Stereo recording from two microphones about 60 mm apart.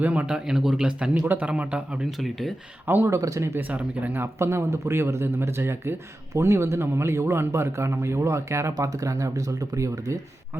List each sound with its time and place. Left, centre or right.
0.0 s a man's voice: right
0.3 s a man's voice: centre
2.0 s speech: centre
2.8 s speech: right
3.1 s speech: right
3.7 s a man's voice: right
4.1 s speech: right
8.7 s speech: right